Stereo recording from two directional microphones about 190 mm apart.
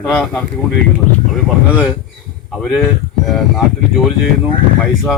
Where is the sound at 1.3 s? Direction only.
5° right (ahead or behind).